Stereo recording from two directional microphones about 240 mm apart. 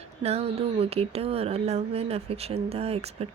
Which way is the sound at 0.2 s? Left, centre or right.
Right.